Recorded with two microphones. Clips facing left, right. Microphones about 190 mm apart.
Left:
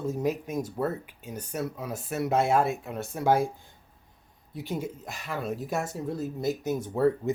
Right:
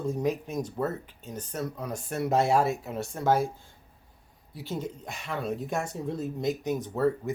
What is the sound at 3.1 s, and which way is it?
Speech, 15° left (ahead or behind).